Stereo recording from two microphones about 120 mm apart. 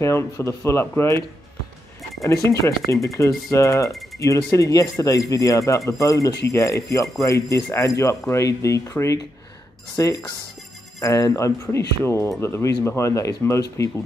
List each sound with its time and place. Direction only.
0.0 s speech: 25° left (ahead or behind)
2.2 s speech: 25° left (ahead or behind)